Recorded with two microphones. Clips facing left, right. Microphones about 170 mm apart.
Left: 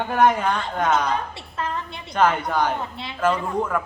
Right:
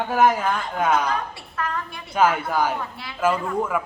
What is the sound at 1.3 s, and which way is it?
Speech, 25° left (ahead or behind).